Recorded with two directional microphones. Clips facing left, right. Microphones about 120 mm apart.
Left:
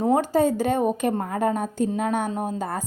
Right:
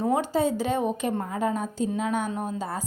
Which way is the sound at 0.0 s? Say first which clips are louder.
Left 4 dB; 45° left (ahead or behind).